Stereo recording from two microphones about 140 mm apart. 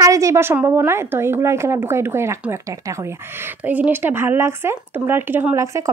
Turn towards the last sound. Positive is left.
turn(degrees=-20)  # may be behind; listen again after turning